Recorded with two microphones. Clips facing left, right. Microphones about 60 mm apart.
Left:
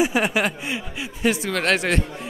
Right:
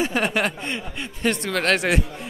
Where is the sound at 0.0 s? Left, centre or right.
Centre.